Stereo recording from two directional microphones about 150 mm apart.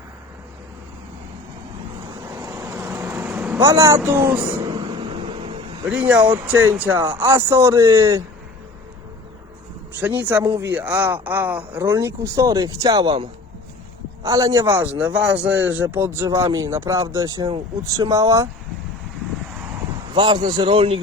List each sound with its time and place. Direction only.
2.3 s vehicle: 25° right (ahead or behind)
3.2 s vehicle: 5° right (ahead or behind)
3.7 s speech: 20° right (ahead or behind)
4.7 s a sound: 35° right (ahead or behind)
5.9 s a man's voice: 10° right (ahead or behind)
10.0 s a man's voice: 10° right (ahead or behind); by 13.2 s 30° right (ahead or behind)
14.3 s a man's voice: 25° right (ahead or behind)
20.1 s a man's voice: 30° right (ahead or behind)